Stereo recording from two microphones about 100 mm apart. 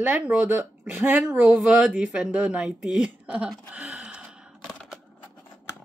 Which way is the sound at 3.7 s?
15° right (ahead or behind).